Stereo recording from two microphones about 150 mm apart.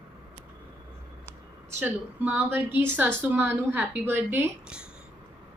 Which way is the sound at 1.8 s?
10° right (ahead or behind).